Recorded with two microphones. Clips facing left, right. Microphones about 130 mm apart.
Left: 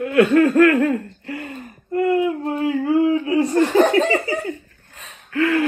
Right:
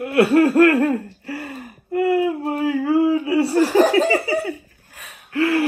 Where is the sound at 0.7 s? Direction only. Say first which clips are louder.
Even; 10° right (ahead or behind).